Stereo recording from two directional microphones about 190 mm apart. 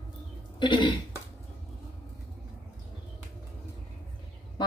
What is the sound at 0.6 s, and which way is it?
Speech, 25° left (ahead or behind).